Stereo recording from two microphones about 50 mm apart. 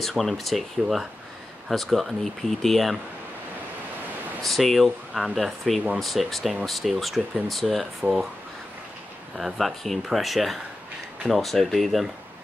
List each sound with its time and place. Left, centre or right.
0.2 s speech: centre
4.4 s speech: centre
9.4 s speech: centre